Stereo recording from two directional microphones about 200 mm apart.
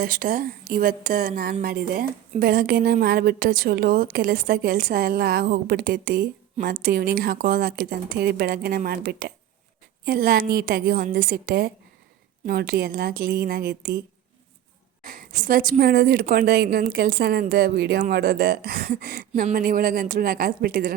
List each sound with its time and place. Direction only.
0.0 s a woman's voice: 45° right (ahead or behind)
15.0 s a woman's voice: 45° right (ahead or behind)